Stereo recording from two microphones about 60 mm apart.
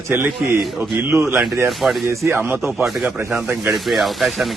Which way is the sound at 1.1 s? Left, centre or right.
Right.